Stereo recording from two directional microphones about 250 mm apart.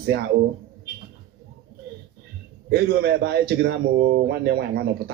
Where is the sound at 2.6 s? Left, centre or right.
Right.